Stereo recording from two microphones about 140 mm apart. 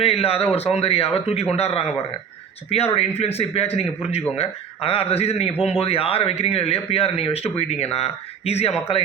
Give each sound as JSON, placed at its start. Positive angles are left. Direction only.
{"t": 0.0, "sound": "speech", "side_deg": 45}